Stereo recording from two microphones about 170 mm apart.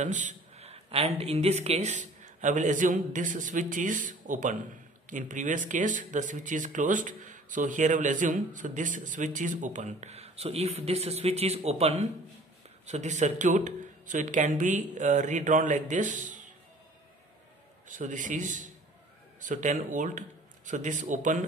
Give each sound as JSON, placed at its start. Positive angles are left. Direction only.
{"t": 0.0, "sound": "a man's voice", "side_deg": -45}
{"t": 17.8, "sound": "speech", "side_deg": -50}